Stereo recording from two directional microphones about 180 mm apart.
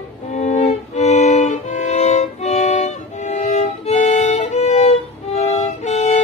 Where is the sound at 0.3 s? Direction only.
40° left (ahead or behind).